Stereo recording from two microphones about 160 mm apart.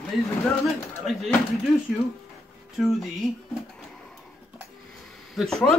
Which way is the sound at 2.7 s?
Centre (ahead or behind).